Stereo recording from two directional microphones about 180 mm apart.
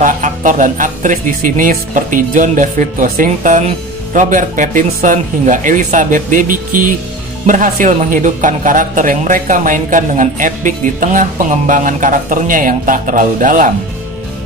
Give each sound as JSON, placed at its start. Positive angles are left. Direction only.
{"t": 0.0, "sound": "speech", "side_deg": -45}